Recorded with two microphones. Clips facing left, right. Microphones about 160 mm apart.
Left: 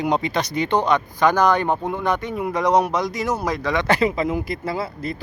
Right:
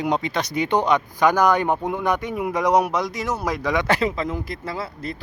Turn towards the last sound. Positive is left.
turn(degrees=5)  # may be behind; listen again after turning